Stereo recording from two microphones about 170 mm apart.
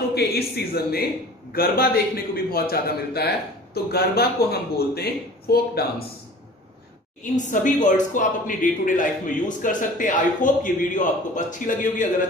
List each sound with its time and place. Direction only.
0.1 s a man's voice: 70° left (ahead or behind)
7.3 s a man's voice: 45° left (ahead or behind)